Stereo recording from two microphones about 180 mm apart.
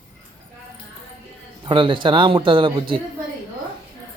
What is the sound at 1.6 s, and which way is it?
A man's voice, 30° right (ahead or behind).